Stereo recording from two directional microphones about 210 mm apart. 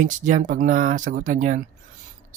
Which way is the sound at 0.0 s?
35° right (ahead or behind).